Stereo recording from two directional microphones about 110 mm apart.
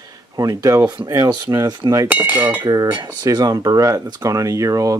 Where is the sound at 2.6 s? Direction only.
40° right (ahead or behind).